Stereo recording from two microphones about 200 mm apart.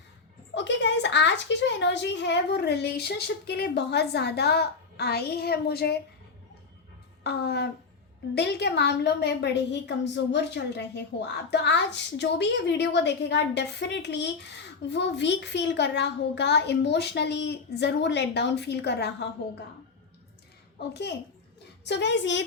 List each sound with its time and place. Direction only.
0.5 s a woman's voice: 60° left (ahead or behind)
7.3 s a woman's voice: 55° left (ahead or behind)
20.7 s a woman's voice: 55° left (ahead or behind)